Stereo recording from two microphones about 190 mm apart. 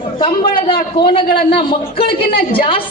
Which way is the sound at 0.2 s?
25° left (ahead or behind).